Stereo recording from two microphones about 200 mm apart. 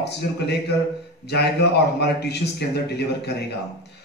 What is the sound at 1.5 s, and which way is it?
A man's voice, 55° left (ahead or behind).